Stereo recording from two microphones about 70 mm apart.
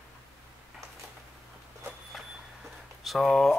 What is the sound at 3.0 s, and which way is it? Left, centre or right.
Speech, centre.